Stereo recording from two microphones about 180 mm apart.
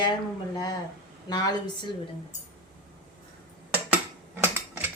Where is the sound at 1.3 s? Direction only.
20° left (ahead or behind).